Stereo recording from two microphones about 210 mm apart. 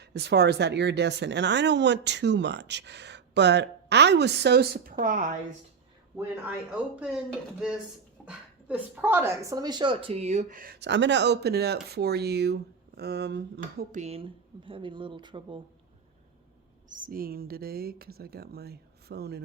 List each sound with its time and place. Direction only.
0.0 s speech: 55° right (ahead or behind)
6.1 s speech: 5° right (ahead or behind)
8.2 s a woman's voice: 5° right (ahead or behind); by 15.6 s 25° right (ahead or behind)
16.9 s speech: 45° right (ahead or behind)